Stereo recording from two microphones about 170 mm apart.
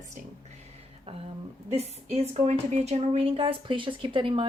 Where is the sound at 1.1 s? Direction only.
35° right (ahead or behind).